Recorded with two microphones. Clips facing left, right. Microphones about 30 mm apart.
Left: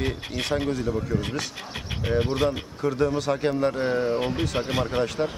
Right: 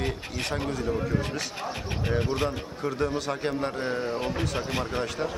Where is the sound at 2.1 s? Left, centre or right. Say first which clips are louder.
Left 4 dB; centre.